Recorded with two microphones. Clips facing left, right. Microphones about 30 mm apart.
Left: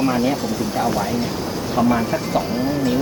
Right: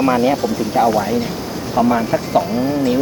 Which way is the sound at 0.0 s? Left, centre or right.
Centre.